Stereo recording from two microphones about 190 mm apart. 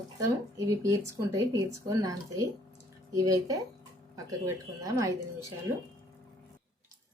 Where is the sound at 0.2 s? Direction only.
15° right (ahead or behind).